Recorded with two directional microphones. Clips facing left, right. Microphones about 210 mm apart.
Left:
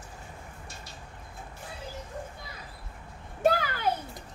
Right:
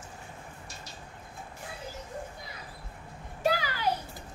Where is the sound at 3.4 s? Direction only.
50° left (ahead or behind).